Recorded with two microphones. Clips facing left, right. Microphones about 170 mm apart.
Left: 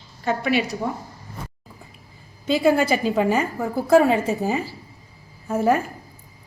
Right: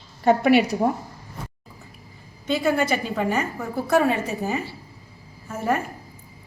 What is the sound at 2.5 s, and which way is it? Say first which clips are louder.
Speech: left 3 dB; 30° left (ahead or behind).